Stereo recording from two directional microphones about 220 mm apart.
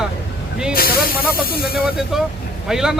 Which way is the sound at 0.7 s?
45° left (ahead or behind).